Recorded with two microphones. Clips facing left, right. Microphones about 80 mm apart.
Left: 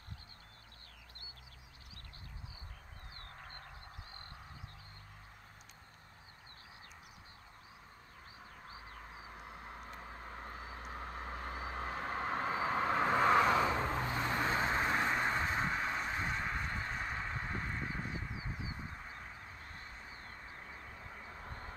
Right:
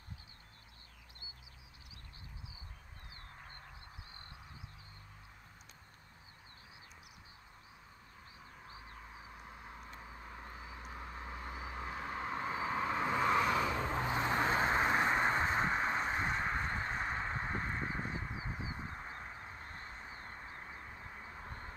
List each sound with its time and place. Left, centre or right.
9.3 s vehicle: left
14.0 s vehicle: right